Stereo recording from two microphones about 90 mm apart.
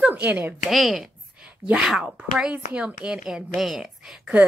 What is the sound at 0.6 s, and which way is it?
A woman's voice, centre (ahead or behind).